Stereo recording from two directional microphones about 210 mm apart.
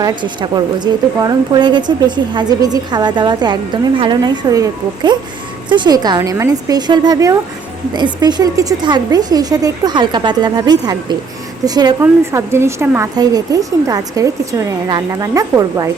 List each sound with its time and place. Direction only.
0.0 s a woman's voice: 20° right (ahead or behind)